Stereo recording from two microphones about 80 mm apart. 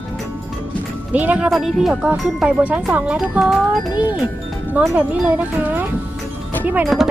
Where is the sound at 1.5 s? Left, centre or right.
Centre.